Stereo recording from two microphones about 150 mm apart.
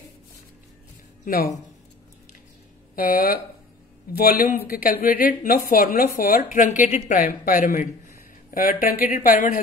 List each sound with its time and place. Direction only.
1.2 s speech: 60° left (ahead or behind)
3.0 s speech: 65° left (ahead or behind)
4.2 s speech: 80° left; by 9.6 s 60° left (ahead or behind)